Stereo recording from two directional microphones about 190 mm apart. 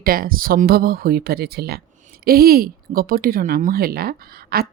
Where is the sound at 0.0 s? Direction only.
50° right (ahead or behind).